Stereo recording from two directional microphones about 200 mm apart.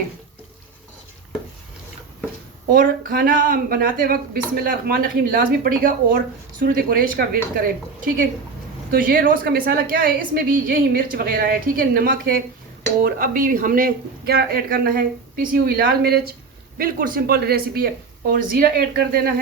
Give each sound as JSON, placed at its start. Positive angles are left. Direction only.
{"t": 2.6, "sound": "speech", "side_deg": -45}
{"t": 8.9, "sound": "speech", "side_deg": -45}